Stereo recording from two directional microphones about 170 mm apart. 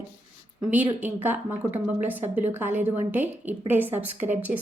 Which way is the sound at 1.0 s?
10° right (ahead or behind).